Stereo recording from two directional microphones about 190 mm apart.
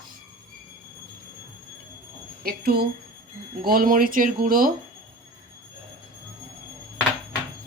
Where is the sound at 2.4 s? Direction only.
55° right (ahead or behind).